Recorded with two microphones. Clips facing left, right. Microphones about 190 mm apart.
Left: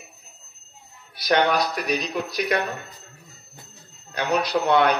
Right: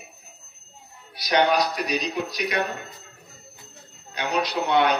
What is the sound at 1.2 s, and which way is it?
A man's voice, 55° left (ahead or behind).